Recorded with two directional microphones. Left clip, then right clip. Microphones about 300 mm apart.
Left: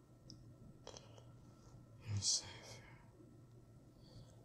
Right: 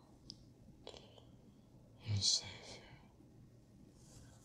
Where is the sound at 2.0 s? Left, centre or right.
Centre.